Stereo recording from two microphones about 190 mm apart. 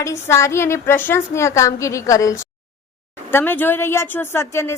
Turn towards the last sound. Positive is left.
turn(degrees=15)  # may be behind; listen again after turning